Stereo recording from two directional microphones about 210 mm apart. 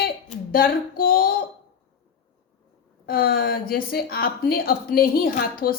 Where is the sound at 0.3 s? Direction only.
45° left (ahead or behind).